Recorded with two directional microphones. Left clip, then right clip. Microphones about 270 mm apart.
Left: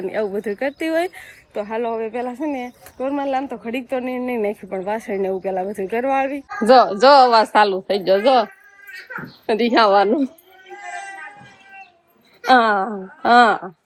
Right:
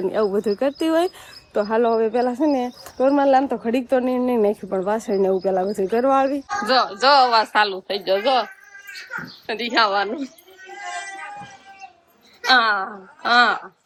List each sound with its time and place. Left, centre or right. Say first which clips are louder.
0.0 s speech: right 2 dB; centre
6.7 s a woman's voice: left 6 dB; centre
9.5 s a woman's voice: left 5 dB; centre
12.5 s a woman's voice: left 2 dB; centre